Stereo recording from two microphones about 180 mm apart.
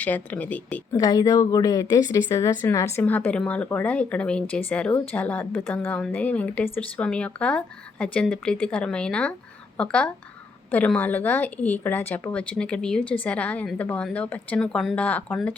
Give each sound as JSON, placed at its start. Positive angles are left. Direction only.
{"t": 0.0, "sound": "a woman's voice", "side_deg": 10}
{"t": 0.9, "sound": "a woman's voice", "side_deg": 20}